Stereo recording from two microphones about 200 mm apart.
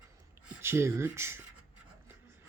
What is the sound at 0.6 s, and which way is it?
Speech, 15° right (ahead or behind).